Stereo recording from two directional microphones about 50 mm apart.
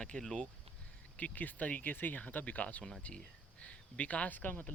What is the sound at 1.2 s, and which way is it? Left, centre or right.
Speech, left.